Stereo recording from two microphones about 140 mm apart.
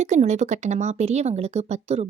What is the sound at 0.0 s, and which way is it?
Speech, 55° right (ahead or behind).